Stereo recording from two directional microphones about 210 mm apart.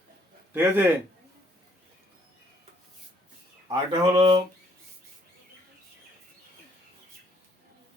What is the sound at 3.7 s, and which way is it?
Speech, 25° right (ahead or behind).